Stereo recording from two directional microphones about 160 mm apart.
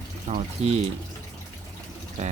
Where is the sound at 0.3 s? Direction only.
50° right (ahead or behind).